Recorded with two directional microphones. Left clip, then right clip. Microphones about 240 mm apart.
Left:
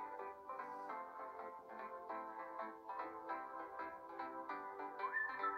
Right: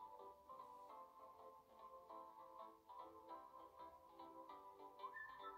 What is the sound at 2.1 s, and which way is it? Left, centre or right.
Music, left.